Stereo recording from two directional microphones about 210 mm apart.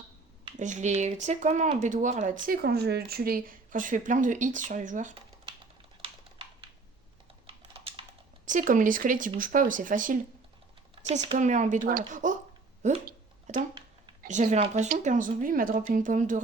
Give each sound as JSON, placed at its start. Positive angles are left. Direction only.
{"t": 0.5, "sound": "a woman's voice", "side_deg": -35}
{"t": 2.5, "sound": "a woman's voice", "side_deg": -45}
{"t": 7.4, "sound": "typing", "side_deg": -25}
{"t": 8.4, "sound": "a woman's voice", "side_deg": -40}
{"t": 11.3, "sound": "a woman's voice", "side_deg": -35}
{"t": 12.8, "sound": "a sound", "side_deg": -35}
{"t": 13.6, "sound": "a sound", "side_deg": -25}
{"t": 14.2, "sound": "a woman's voice", "side_deg": -40}